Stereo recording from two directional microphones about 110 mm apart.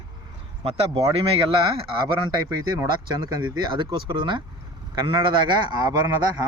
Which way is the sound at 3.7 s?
50° right (ahead or behind).